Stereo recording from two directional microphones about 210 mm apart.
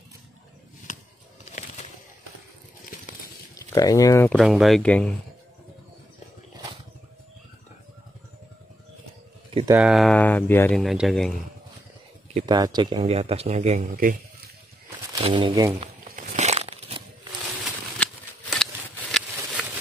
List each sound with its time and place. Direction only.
0.9 s a sound: 40° left (ahead or behind)
3.5 s speech: 15° left (ahead or behind)
4.3 s speech: centre (ahead or behind)
9.5 s a sound: 25° right (ahead or behind)
9.8 s speech: centre (ahead or behind)
12.4 s speech: 20° right (ahead or behind); by 14.1 s 40° right (ahead or behind)
15.2 s speech: 25° right (ahead or behind)
15.8 s crumpling: 35° right (ahead or behind)
17.9 s a sound: 5° left (ahead or behind)